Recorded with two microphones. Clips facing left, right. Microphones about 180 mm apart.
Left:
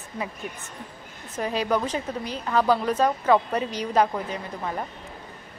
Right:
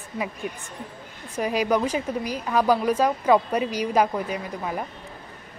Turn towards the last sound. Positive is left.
turn(degrees=-10)  # may be behind; listen again after turning